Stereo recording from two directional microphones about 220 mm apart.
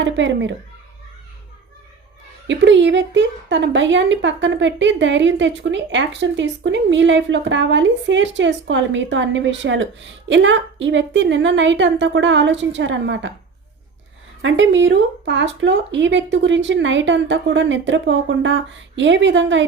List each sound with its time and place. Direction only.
0.0 s speech: 55° right (ahead or behind)
2.5 s speech: 55° right (ahead or behind)
14.4 s speech: 60° right (ahead or behind)